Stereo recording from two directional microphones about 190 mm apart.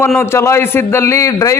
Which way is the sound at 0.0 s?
10° left (ahead or behind).